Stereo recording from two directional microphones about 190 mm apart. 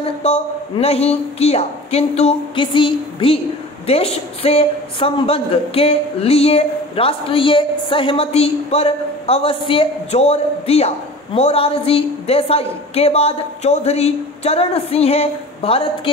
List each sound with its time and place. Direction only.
0.2 s a man's voice: 35° left (ahead or behind)